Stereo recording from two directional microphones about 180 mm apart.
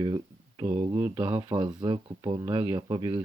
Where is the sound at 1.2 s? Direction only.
25° right (ahead or behind).